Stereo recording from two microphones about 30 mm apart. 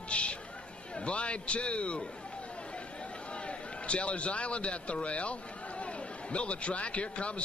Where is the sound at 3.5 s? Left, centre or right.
Left.